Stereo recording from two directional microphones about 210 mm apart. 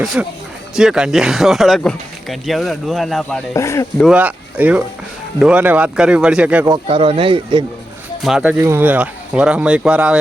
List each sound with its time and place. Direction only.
0.0 s speech: 5° right (ahead or behind); by 3.8 s 15° left (ahead or behind)
4.0 s speech: 5° right (ahead or behind)
6.7 s speech: 25° right (ahead or behind)
8.2 s speech: 5° right (ahead or behind)